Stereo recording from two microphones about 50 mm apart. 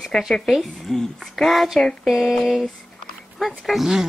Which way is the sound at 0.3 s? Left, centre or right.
Centre.